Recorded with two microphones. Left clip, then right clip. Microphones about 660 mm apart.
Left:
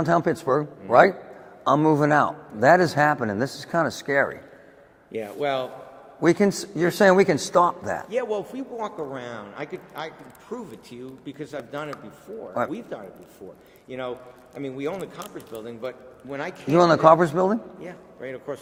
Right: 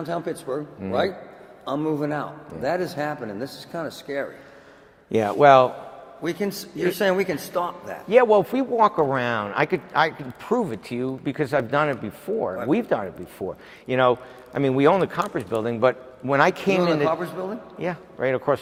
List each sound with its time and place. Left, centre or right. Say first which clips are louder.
0.0 s a man's voice: left 7 dB; left
5.1 s a man's voice: right 12 dB; right
6.2 s a man's voice: left 7 dB; left
8.1 s a man's voice: right 14 dB; right
16.8 s a man's voice: left 6 dB; left
17.7 s a man's voice: right 11 dB; right